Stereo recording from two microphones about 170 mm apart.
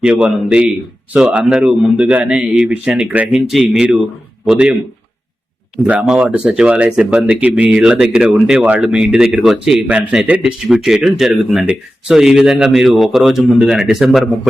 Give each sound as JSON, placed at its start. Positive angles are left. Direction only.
{"t": 0.0, "sound": "speech", "side_deg": -5}